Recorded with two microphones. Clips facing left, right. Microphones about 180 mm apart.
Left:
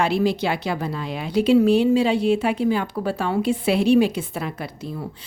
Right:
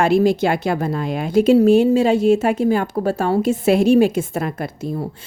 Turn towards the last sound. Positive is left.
turn(degrees=-45)  # may be behind; listen again after turning